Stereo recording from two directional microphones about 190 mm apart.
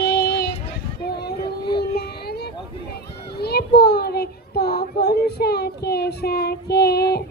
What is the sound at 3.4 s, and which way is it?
Child singing, 55° left (ahead or behind).